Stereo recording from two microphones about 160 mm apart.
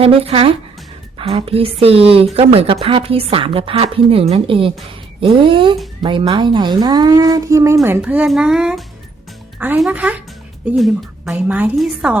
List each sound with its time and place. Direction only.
0.0 s a woman's voice: 35° right (ahead or behind); by 12.1 s 10° right (ahead or behind)